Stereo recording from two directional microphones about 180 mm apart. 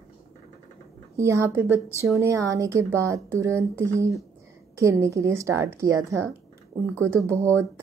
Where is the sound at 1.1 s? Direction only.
15° right (ahead or behind).